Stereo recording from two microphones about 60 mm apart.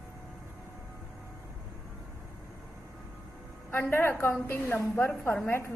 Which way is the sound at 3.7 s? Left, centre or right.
Left.